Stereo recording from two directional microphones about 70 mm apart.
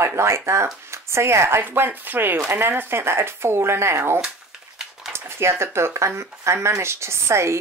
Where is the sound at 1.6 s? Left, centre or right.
Right.